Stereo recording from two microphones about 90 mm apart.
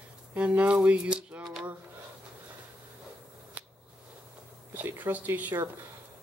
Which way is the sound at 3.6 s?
15° right (ahead or behind).